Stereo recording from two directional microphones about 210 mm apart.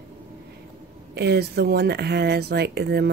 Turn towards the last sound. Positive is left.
turn(degrees=-50)  # may be behind; listen again after turning